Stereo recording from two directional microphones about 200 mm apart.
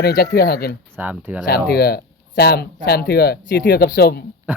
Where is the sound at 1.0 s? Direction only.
10° right (ahead or behind).